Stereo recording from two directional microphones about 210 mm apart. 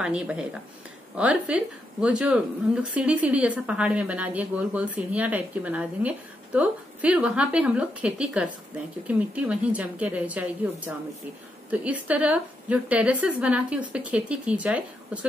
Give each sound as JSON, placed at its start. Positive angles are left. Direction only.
{"t": 0.0, "sound": "speech", "side_deg": -5}